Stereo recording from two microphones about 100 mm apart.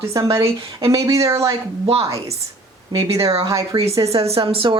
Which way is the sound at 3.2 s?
75° right (ahead or behind).